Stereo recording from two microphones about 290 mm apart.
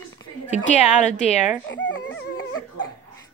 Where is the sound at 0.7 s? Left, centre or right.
Left.